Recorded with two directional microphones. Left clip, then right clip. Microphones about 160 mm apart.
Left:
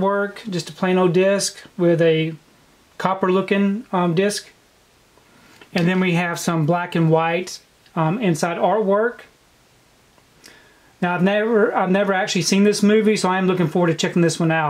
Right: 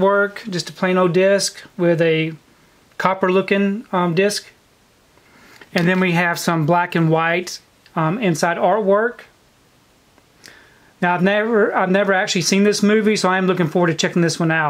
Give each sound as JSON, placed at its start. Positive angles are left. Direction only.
{"t": 0.0, "sound": "speech", "side_deg": -30}
{"t": 5.6, "sound": "speech", "side_deg": -30}
{"t": 11.0, "sound": "speech", "side_deg": -25}